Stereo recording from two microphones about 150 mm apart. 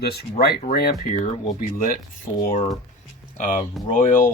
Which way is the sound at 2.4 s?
65° left (ahead or behind).